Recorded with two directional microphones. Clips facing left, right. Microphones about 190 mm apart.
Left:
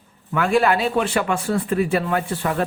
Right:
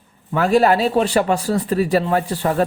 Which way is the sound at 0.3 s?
35° right (ahead or behind).